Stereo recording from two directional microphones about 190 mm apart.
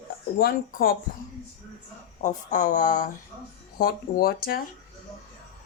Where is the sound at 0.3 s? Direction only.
50° left (ahead or behind).